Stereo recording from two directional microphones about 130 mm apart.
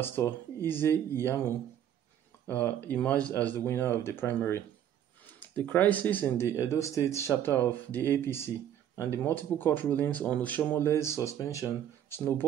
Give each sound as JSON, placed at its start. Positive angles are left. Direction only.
{"t": 0.0, "sound": "speech", "side_deg": 15}
{"t": 9.2, "sound": "speech", "side_deg": 15}